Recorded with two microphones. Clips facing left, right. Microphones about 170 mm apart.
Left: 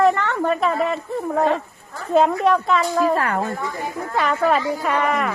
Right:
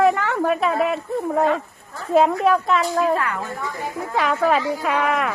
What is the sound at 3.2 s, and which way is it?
Speech, 45° left (ahead or behind).